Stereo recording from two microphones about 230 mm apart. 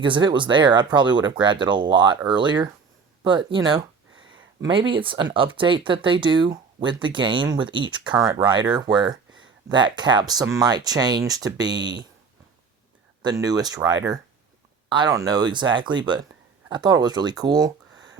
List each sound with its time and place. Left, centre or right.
0.0 s speech: centre
13.2 s speech: centre